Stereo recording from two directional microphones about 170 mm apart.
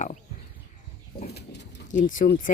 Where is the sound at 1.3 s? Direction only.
90° left.